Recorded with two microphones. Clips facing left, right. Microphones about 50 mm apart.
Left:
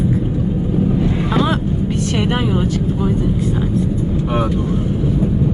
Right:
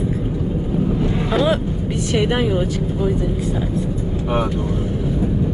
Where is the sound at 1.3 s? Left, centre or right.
Centre.